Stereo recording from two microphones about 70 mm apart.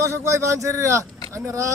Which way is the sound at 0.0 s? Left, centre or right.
Right.